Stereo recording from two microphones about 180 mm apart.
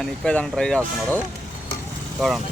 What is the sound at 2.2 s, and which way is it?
Speech, 5° left (ahead or behind).